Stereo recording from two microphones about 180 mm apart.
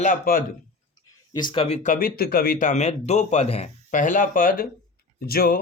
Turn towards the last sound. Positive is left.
turn(degrees=55)  # may be behind; listen again after turning